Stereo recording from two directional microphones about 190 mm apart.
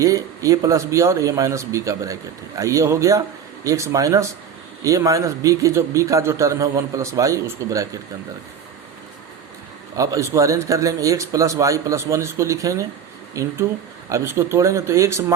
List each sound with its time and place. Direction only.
0.0 s a man's voice: 15° right (ahead or behind)
10.0 s a man's voice: 15° right (ahead or behind)